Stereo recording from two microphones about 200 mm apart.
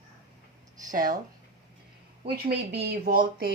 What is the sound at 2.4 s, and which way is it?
Speech, 50° right (ahead or behind).